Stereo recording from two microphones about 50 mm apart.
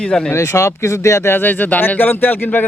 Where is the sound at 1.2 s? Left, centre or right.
Left.